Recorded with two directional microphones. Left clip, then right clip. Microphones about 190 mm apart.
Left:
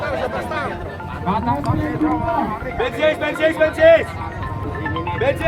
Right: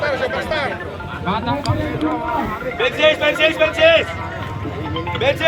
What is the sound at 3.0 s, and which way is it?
Speech, 65° left (ahead or behind).